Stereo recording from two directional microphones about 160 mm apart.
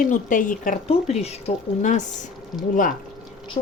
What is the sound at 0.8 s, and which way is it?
Speech, 40° left (ahead or behind).